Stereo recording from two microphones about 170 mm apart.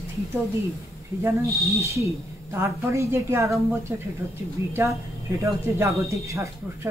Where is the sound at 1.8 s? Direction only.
15° right (ahead or behind).